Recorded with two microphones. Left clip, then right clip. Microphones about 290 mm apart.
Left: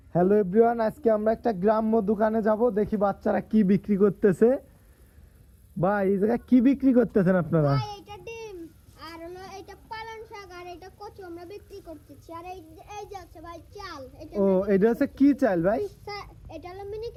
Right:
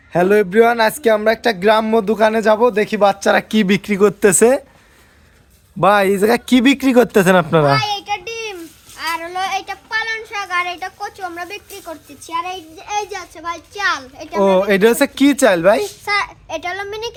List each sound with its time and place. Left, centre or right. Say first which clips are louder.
0.1 s a child's voice: right 9 dB; centre
2.0 s a child's voice: right 10 dB; centre
3.0 s a child's voice: right 16 dB; centre
5.8 s speech: right 12 dB; centre
7.8 s child singing: right 17 dB; centre
13.0 s a child's voice: right 14 dB; centre
16.6 s speech: right 13 dB; centre